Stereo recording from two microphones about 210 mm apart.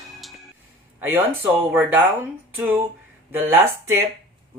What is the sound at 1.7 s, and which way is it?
Speech, 10° right (ahead or behind).